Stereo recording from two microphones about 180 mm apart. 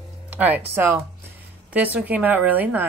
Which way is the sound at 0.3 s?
10° right (ahead or behind).